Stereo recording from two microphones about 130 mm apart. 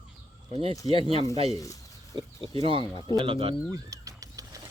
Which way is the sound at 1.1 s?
50° right (ahead or behind).